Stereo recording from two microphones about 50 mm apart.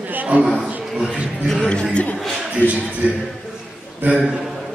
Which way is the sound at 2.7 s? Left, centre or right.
Right.